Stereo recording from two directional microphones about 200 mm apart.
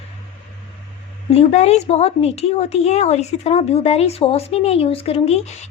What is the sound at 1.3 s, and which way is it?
A woman's voice, 30° left (ahead or behind).